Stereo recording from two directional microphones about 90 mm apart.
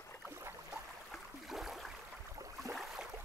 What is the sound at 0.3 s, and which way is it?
Boat, 30° right (ahead or behind).